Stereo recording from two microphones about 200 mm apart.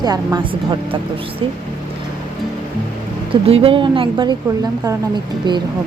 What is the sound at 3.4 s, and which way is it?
Speech, 30° right (ahead or behind).